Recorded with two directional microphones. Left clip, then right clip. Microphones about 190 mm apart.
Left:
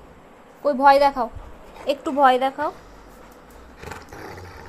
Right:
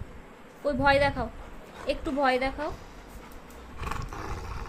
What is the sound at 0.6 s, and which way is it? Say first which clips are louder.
Speech: left 8 dB; 15° left (ahead or behind).